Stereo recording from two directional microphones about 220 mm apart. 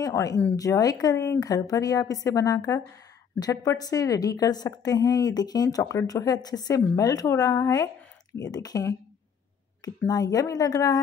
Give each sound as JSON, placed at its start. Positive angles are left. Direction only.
{"t": 0.0, "sound": "a woman's voice", "side_deg": 15}
{"t": 10.0, "sound": "a woman's voice", "side_deg": 15}